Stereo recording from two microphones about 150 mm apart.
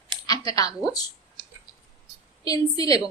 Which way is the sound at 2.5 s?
25° left (ahead or behind).